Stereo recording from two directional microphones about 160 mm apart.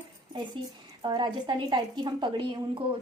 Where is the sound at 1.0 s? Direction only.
25° right (ahead or behind).